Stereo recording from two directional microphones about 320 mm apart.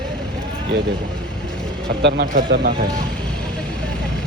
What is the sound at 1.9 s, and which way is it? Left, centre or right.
Speech, right.